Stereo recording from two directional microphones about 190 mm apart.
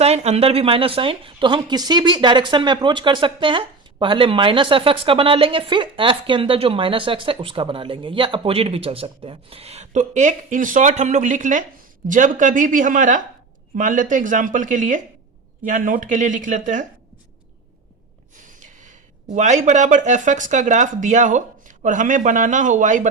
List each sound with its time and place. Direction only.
0.0 s speech: 35° right (ahead or behind)
18.4 s speech: 40° right (ahead or behind)